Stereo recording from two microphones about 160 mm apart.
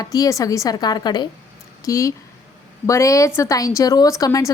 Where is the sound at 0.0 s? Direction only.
20° left (ahead or behind).